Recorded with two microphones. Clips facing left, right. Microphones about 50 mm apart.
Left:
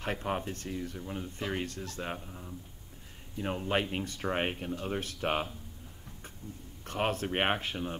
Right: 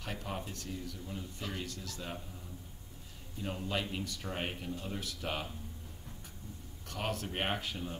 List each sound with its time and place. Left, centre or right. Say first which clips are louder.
0.0 s speech: left 7 dB; left
3.3 s speech: left 6 dB; left
6.9 s speech: left 6 dB; left